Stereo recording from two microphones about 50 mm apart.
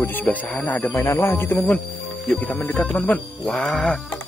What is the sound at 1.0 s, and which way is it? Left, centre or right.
Speech, left.